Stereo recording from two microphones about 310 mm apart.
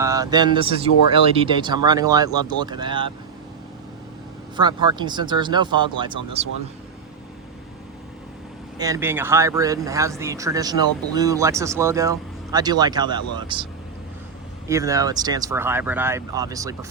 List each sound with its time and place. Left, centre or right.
0.0 s speech: centre
4.5 s speech: centre
8.8 s speech: centre
14.7 s speech: centre